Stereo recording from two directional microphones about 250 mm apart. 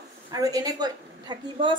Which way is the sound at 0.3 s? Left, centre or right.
Centre.